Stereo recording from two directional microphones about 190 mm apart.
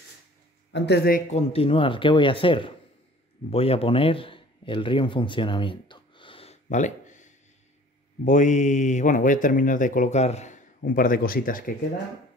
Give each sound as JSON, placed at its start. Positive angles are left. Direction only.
{"t": 0.7, "sound": "speech", "side_deg": 60}
{"t": 1.2, "sound": "a man's voice", "side_deg": 35}